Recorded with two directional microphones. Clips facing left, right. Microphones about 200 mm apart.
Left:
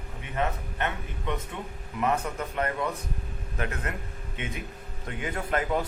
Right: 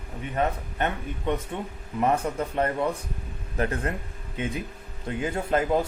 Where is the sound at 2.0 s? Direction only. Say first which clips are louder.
Right 3 dB; 30° right (ahead or behind).